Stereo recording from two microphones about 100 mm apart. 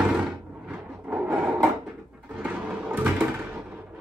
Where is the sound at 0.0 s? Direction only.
10° right (ahead or behind).